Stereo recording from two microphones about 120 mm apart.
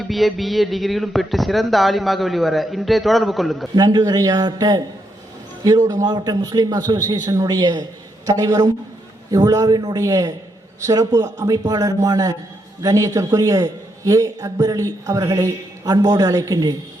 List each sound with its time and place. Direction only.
0.0 s speech: centre (ahead or behind)
3.8 s a man's voice: 30° right (ahead or behind)